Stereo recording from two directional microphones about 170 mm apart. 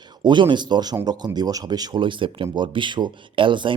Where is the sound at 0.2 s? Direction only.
25° right (ahead or behind).